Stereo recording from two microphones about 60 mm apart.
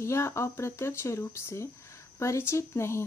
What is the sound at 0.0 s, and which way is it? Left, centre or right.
Speech, left.